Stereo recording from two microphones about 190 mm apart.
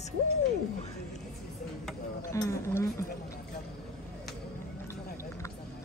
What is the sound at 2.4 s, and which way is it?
Speech, 15° left (ahead or behind).